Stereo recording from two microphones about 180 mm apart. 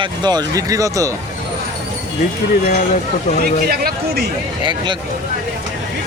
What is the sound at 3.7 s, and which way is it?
Speech, 60° right (ahead or behind).